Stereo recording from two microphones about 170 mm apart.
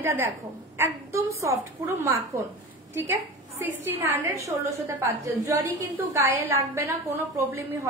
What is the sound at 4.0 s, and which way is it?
Speech, 15° right (ahead or behind).